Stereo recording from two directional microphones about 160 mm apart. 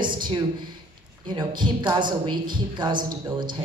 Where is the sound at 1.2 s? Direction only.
30° right (ahead or behind).